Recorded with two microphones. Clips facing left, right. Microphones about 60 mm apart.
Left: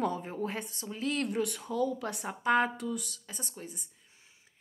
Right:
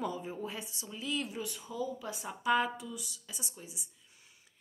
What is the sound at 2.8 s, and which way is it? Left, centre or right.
Speech, left.